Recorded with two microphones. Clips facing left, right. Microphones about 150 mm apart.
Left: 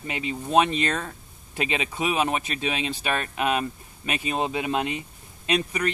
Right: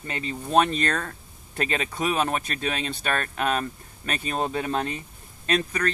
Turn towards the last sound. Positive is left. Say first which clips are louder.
# even
turn(degrees=10)  # may be behind; listen again after turning